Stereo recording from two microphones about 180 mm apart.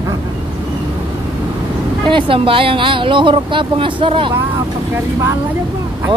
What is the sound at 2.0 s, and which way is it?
Speech, 30° right (ahead or behind).